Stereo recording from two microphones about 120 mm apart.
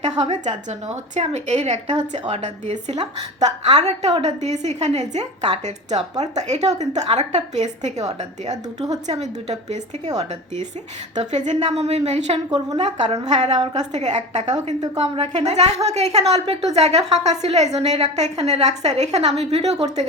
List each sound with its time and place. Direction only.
0.0 s a woman's voice: 70° right (ahead or behind)
12.5 s a woman's voice: 40° right (ahead or behind)
12.7 s a woman's voice: 65° right (ahead or behind)
15.0 s a woman's voice: 50° right (ahead or behind)
15.3 s a woman's voice: 65° right (ahead or behind)